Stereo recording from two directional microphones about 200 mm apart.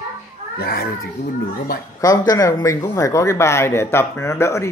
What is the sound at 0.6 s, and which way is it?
Speech, 50° left (ahead or behind).